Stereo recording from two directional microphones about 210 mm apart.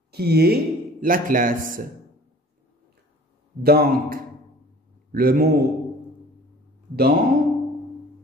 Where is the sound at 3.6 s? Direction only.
45° right (ahead or behind).